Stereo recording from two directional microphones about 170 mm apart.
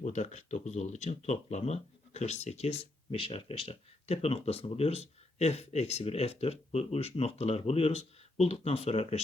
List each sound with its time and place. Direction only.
0.0 s speech: 45° left (ahead or behind)